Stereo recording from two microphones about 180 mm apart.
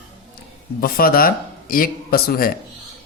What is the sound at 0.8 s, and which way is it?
Speech, 55° left (ahead or behind).